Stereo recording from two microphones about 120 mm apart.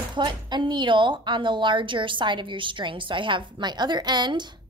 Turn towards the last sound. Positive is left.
turn(degrees=-40)  # may be behind; listen again after turning